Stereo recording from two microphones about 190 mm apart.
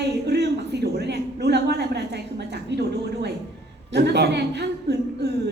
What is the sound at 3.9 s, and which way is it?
Speech, 60° right (ahead or behind).